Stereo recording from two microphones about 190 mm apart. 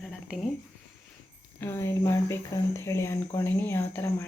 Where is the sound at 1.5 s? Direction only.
10° left (ahead or behind).